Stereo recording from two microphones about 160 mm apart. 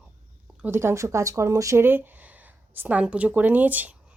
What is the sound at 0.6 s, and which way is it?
Speech, 15° right (ahead or behind).